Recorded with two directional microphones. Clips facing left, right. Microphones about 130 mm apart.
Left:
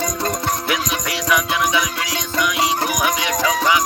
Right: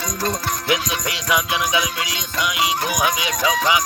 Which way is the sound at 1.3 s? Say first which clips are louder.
Left 2 dB; 20° right (ahead or behind).